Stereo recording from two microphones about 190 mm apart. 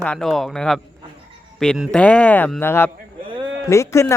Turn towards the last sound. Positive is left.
turn(degrees=15)  # may be behind; listen again after turning